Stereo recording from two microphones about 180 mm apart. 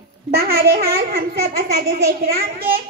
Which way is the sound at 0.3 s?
60° right (ahead or behind).